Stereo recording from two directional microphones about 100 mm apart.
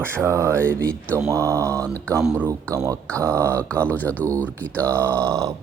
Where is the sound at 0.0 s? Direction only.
25° right (ahead or behind).